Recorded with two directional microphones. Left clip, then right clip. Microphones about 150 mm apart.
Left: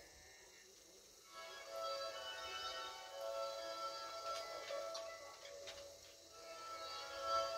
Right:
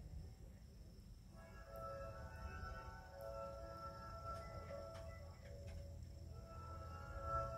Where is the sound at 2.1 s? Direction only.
15° left (ahead or behind).